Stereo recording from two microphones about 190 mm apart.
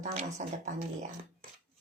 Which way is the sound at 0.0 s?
35° right (ahead or behind).